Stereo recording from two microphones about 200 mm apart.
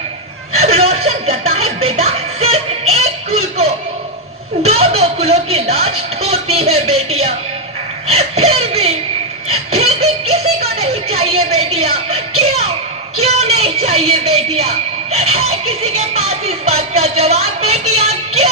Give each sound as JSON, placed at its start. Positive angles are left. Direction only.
{"t": 0.5, "sound": "music", "side_deg": -30}
{"t": 4.6, "sound": "speech", "side_deg": -30}
{"t": 9.5, "sound": "a sound", "side_deg": -30}
{"t": 12.4, "sound": "music", "side_deg": -30}
{"t": 13.1, "sound": "a woman's voice", "side_deg": -30}
{"t": 17.9, "sound": "music", "side_deg": -30}